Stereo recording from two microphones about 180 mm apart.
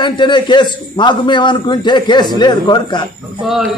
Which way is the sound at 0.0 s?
25° left (ahead or behind).